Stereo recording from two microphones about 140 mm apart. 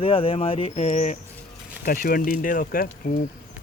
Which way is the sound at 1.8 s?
90° left.